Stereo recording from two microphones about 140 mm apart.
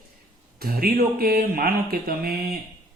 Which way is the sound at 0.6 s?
90° right.